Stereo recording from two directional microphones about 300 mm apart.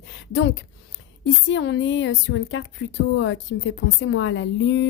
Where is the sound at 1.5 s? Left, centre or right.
Left.